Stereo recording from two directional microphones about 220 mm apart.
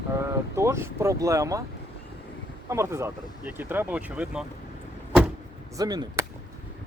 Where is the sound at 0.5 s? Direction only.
10° right (ahead or behind).